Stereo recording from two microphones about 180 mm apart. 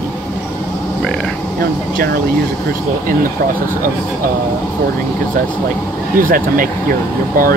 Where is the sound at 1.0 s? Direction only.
5° left (ahead or behind).